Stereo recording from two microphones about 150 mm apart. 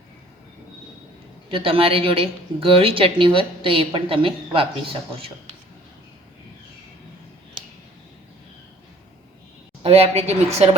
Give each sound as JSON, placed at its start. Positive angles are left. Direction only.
{"t": 1.5, "sound": "a woman's voice", "side_deg": -35}
{"t": 9.8, "sound": "speech", "side_deg": -45}